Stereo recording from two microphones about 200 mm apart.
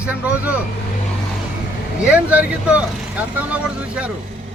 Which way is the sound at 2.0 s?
5° right (ahead or behind).